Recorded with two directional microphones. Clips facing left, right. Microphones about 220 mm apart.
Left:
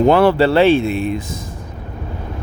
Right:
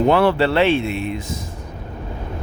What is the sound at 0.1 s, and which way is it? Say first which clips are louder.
Speech: left 4 dB; 45° left (ahead or behind).